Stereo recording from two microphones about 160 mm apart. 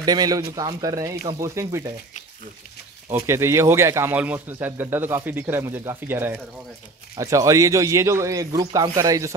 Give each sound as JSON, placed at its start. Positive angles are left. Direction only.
{"t": 0.0, "sound": "speech", "side_deg": -25}
{"t": 3.1, "sound": "a man's voice", "side_deg": -15}